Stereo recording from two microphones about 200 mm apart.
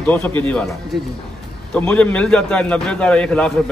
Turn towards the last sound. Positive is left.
turn(degrees=5)  # may be behind; listen again after turning